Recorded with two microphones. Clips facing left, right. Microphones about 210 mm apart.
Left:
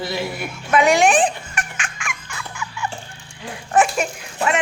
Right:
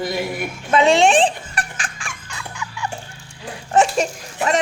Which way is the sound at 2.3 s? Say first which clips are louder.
Even; 20° right (ahead or behind).